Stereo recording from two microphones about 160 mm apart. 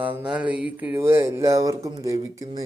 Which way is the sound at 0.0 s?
10° right (ahead or behind).